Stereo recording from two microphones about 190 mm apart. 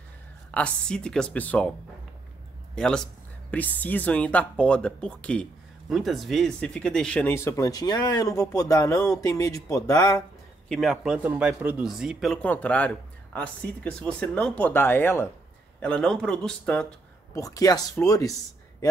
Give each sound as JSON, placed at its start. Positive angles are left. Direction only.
{"t": 0.6, "sound": "speech", "side_deg": 5}
{"t": 2.7, "sound": "speech", "side_deg": 5}
{"t": 10.7, "sound": "speech", "side_deg": 0}
{"t": 17.3, "sound": "speech", "side_deg": 15}